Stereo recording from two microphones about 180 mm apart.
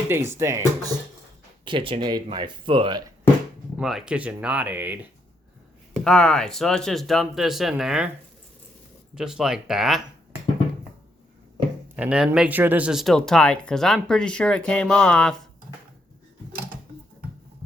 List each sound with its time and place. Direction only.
0.1 s speech: 15° right (ahead or behind)
3.8 s speech: 5° right (ahead or behind)
6.1 s speech: 5° left (ahead or behind)
9.1 s speech: 5° right (ahead or behind)
11.9 s speech: 5° right (ahead or behind)